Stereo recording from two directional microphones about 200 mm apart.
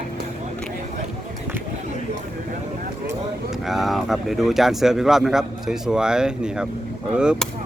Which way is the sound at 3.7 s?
Centre (ahead or behind).